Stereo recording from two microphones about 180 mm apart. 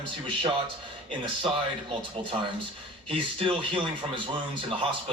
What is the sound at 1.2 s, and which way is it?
Speech, 30° right (ahead or behind).